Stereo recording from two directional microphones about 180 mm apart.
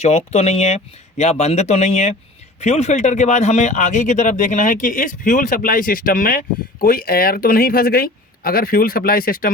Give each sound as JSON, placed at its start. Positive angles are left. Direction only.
{"t": 0.0, "sound": "speech", "side_deg": 35}